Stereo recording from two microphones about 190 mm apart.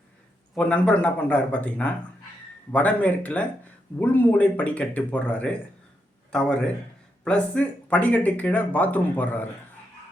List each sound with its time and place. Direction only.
0.5 s a man's voice: 5° left (ahead or behind)